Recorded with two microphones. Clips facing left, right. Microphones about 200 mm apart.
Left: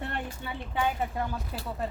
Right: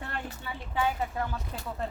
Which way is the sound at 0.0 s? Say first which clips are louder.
Left 3 dB; 20° left (ahead or behind).